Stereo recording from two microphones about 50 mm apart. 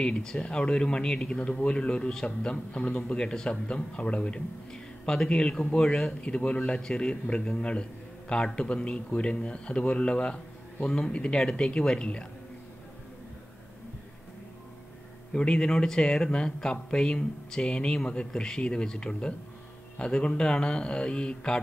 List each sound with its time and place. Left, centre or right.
0.0 s a man's voice: centre
15.3 s a man's voice: centre